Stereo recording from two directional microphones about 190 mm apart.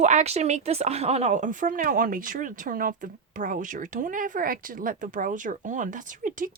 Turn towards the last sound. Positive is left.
turn(degrees=-45)  # may be behind; listen again after turning